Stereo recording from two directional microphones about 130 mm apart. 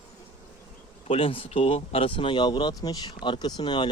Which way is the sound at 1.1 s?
45° left (ahead or behind).